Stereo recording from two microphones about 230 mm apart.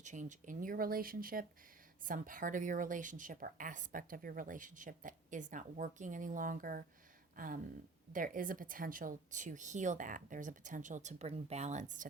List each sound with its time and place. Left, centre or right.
0.0 s a woman's voice: right